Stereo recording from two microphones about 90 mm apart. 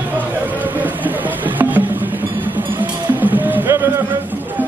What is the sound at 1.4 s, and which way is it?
Music, 20° right (ahead or behind).